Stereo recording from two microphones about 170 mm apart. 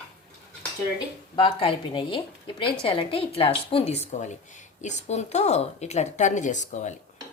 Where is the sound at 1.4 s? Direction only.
30° left (ahead or behind).